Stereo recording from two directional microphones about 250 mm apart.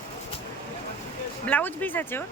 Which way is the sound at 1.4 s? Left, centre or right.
Centre.